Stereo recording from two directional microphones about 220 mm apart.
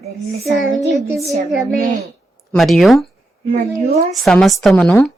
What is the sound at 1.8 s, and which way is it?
Speech, 35° right (ahead or behind).